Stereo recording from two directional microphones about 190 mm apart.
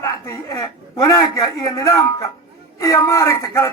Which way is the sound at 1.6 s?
20° left (ahead or behind).